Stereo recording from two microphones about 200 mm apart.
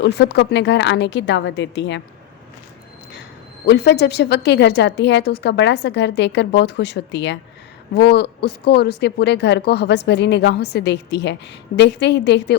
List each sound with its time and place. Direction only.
0.0 s a woman's voice: 60° left (ahead or behind)
3.7 s a woman's voice: 55° left (ahead or behind)